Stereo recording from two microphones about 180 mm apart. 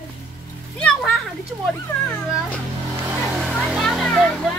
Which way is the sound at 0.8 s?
Centre (ahead or behind).